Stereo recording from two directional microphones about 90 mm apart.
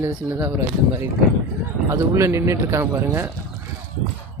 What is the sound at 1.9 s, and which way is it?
Speech, 30° right (ahead or behind).